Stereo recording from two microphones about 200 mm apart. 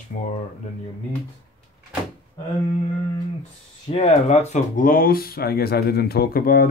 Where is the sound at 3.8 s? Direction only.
30° left (ahead or behind).